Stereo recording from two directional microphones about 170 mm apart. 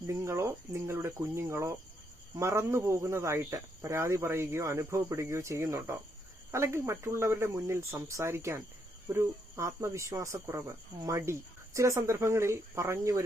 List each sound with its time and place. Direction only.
0.1 s speech: 15° right (ahead or behind)